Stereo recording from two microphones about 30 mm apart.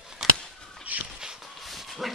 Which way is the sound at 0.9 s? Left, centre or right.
Right.